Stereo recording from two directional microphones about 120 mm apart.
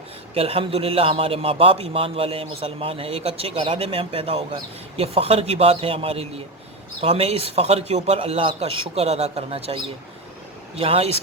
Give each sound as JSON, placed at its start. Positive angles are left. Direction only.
{"t": 0.3, "sound": "a man's voice", "side_deg": -50}